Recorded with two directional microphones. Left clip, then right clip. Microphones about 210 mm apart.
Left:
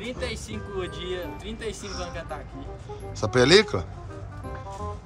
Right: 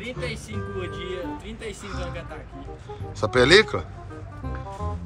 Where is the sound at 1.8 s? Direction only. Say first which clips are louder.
Right 1 dB; 10° left (ahead or behind).